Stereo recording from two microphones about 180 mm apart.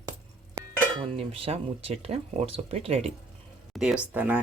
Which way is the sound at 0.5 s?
30° right (ahead or behind).